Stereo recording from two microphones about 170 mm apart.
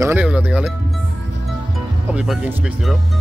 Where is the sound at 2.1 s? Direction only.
5° right (ahead or behind).